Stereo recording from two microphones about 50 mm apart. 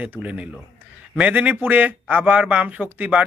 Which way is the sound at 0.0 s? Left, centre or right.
Right.